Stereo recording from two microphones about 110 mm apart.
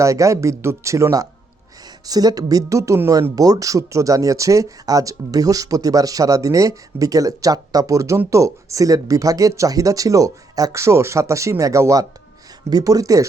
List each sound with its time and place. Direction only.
0.0 s speech: 30° right (ahead or behind)